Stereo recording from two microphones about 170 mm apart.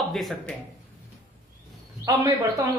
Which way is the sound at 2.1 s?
20° right (ahead or behind).